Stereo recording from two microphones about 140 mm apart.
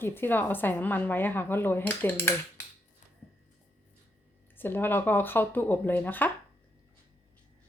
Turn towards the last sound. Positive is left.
turn(degrees=15)  # may be behind; listen again after turning